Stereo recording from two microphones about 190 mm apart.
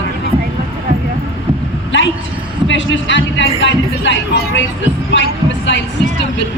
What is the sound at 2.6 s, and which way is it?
Speech, 75° left (ahead or behind).